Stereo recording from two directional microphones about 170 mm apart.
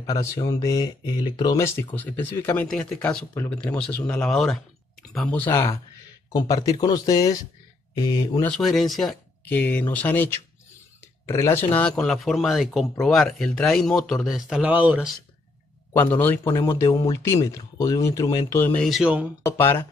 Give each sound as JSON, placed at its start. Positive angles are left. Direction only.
{"t": 0.0, "sound": "speech", "side_deg": 20}
{"t": 6.3, "sound": "speech", "side_deg": 20}
{"t": 8.4, "sound": "speech", "side_deg": 5}
{"t": 12.0, "sound": "speech", "side_deg": 0}
{"t": 15.9, "sound": "speech", "side_deg": 10}
{"t": 18.9, "sound": "a sound", "side_deg": -5}